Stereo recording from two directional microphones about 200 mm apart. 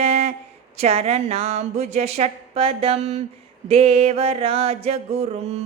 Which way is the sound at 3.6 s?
30° right (ahead or behind).